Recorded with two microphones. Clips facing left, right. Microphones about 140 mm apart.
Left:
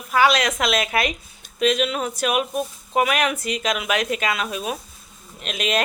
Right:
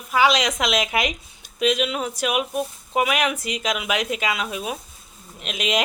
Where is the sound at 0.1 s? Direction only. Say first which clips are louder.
Left 1 dB; 15° right (ahead or behind).